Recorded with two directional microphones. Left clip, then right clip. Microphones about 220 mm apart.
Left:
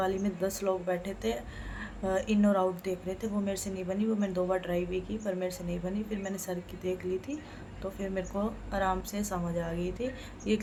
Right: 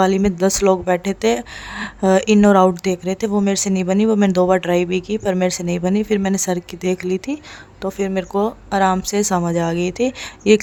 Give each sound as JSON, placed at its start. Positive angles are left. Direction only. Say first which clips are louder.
{"t": 0.0, "sound": "a woman's voice", "louder": "right 15 dB", "side_deg": -50}